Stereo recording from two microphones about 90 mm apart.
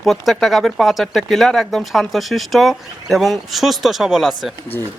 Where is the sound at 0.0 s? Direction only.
5° left (ahead or behind).